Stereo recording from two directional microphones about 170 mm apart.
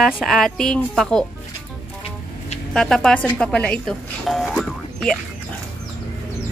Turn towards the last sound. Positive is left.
turn(degrees=0)  # may be behind; listen again after turning